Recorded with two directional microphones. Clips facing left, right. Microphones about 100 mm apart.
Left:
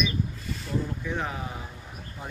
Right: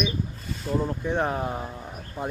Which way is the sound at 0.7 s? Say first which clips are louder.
Right 4 dB; 10° right (ahead or behind).